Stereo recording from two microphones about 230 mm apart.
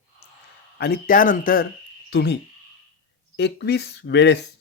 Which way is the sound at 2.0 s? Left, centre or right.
Left.